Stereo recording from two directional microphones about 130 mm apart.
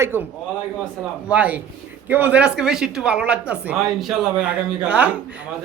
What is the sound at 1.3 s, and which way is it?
A man's voice, 10° right (ahead or behind).